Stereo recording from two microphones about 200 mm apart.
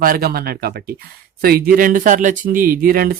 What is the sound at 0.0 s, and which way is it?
Speech, 50° right (ahead or behind).